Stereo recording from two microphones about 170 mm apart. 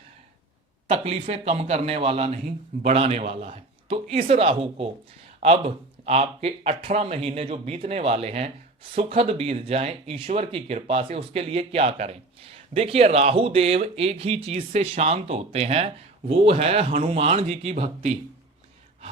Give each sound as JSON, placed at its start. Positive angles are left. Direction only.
{"t": 0.9, "sound": "speech", "side_deg": -35}